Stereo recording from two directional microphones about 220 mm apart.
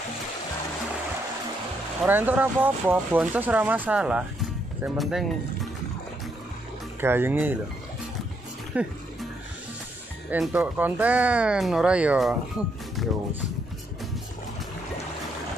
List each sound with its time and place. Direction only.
2.0 s speech: 10° right (ahead or behind)
7.0 s speech: 10° right (ahead or behind)
8.7 s speech: 5° right (ahead or behind)
10.3 s speech: 5° right (ahead or behind)
13.0 s music: centre (ahead or behind)